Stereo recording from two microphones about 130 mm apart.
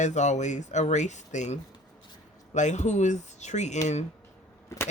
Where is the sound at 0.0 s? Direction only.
65° left (ahead or behind).